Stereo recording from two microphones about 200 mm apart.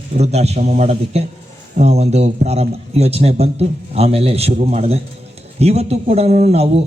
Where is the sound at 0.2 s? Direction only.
30° right (ahead or behind).